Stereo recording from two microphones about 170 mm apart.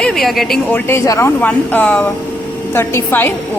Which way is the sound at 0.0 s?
Centre (ahead or behind).